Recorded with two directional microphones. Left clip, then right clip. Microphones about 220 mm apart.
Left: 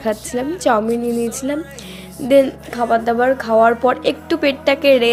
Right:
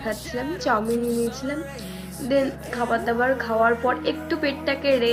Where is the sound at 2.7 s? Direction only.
45° left (ahead or behind).